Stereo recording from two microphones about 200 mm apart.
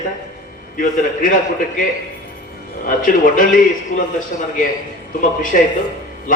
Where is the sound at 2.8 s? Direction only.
45° left (ahead or behind).